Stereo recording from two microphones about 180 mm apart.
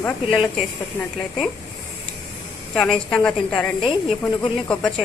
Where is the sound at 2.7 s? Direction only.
Centre (ahead or behind).